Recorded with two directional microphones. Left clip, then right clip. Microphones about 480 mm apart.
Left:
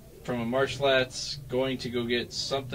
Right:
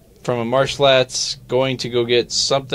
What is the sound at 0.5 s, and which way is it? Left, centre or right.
Speech, right.